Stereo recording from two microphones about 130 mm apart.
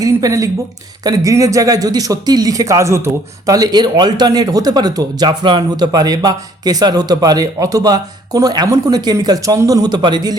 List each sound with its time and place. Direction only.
0.0 s speech: 25° right (ahead or behind)